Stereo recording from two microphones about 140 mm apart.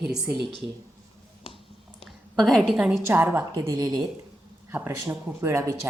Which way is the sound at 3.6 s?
25° right (ahead or behind).